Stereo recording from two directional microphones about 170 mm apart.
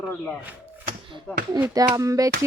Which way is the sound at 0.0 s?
10° left (ahead or behind).